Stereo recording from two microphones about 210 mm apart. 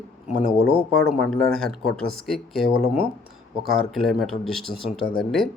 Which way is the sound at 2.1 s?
Centre (ahead or behind).